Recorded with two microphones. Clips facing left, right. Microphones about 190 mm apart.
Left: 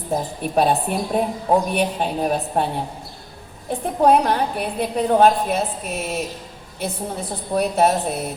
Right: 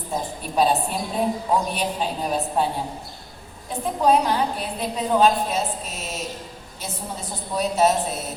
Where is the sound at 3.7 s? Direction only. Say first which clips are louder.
Left 3 dB; 60° left (ahead or behind).